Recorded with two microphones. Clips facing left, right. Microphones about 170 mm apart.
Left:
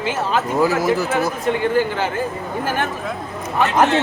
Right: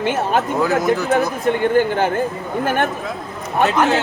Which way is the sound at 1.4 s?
55° right (ahead or behind).